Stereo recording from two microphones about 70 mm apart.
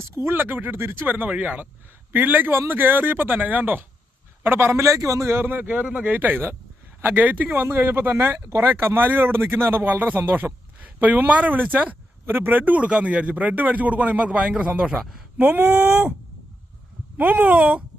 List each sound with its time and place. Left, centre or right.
0.3 s a man's voice: right
7.5 s a man's voice: right
12.2 s a man's voice: right; by 15.3 s centre
15.4 s a man's voice: right
15.7 s speech: centre
17.2 s a man's voice: right